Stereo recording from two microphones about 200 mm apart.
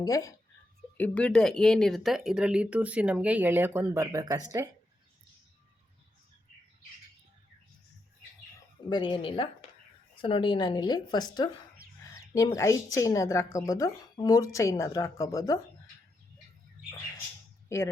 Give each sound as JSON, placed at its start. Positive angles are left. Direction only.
{"t": 0.0, "sound": "a woman's voice", "side_deg": 15}
{"t": 8.9, "sound": "a woman's voice", "side_deg": 25}
{"t": 17.7, "sound": "a woman's voice", "side_deg": 15}